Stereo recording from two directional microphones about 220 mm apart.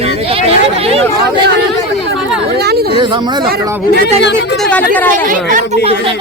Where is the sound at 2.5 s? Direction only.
45° right (ahead or behind).